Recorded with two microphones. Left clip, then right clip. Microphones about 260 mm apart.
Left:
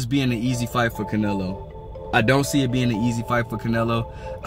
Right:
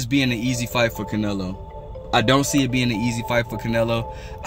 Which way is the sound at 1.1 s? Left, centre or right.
Centre.